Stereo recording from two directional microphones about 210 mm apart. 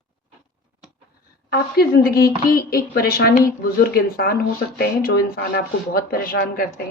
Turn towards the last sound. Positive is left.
turn(degrees=40)  # may be behind; listen again after turning